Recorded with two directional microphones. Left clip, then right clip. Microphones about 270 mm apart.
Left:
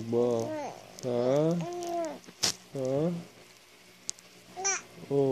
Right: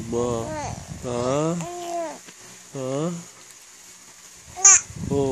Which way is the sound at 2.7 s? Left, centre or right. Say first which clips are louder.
Right 4 dB; right.